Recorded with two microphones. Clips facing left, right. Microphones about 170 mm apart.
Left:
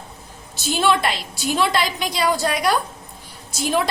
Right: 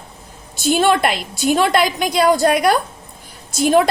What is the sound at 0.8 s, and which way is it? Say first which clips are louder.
A woman's voice: right 1 dB; 50° right (ahead or behind).